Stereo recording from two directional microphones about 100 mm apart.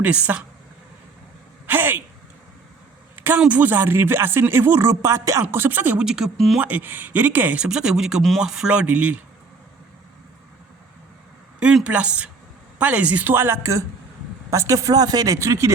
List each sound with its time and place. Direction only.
0.0 s speech: 15° right (ahead or behind)
1.6 s a sound: 20° right (ahead or behind)
3.4 s speech: 15° right (ahead or behind); by 6.6 s centre (ahead or behind)
6.6 s speech: 15° right (ahead or behind)
11.6 s speech: 10° right (ahead or behind); by 15.7 s 30° right (ahead or behind)